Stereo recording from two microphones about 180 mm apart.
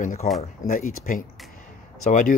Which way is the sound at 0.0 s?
45° left (ahead or behind).